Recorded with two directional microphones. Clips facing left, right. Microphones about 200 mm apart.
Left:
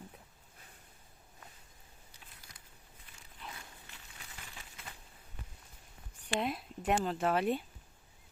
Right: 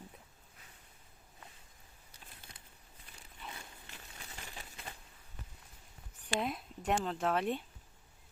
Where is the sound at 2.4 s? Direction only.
25° right (ahead or behind).